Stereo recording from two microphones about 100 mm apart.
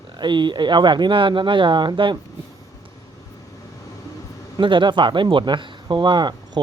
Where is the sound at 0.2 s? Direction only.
50° right (ahead or behind).